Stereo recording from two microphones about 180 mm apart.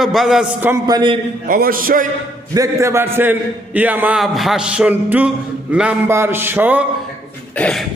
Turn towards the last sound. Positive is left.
turn(degrees=5)  # may be behind; listen again after turning